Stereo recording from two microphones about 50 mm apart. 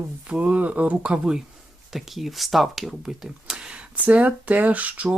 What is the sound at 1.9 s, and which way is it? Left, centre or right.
Speech, centre.